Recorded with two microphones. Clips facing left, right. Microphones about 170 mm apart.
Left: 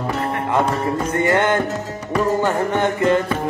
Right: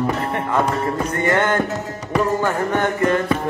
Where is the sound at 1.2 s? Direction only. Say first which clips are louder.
Even; 25° left (ahead or behind).